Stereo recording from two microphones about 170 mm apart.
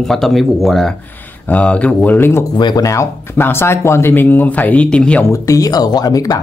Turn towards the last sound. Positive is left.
turn(degrees=20)  # may be behind; listen again after turning